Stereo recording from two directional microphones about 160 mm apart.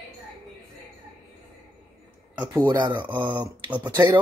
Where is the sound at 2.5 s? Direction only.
30° right (ahead or behind).